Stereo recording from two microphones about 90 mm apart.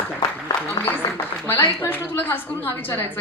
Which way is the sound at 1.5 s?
20° left (ahead or behind).